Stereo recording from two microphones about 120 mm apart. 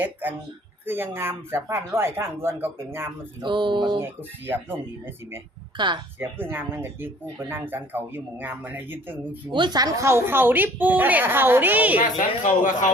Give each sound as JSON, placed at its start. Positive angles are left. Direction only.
{"t": 0.0, "sound": "speech", "side_deg": -15}
{"t": 3.4, "sound": "a sound", "side_deg": -40}
{"t": 4.4, "sound": "speech", "side_deg": -20}
{"t": 5.7, "sound": "speech", "side_deg": -40}
{"t": 6.1, "sound": "speech", "side_deg": -15}
{"t": 9.5, "sound": "speech", "side_deg": -40}
{"t": 12.0, "sound": "speech", "side_deg": 90}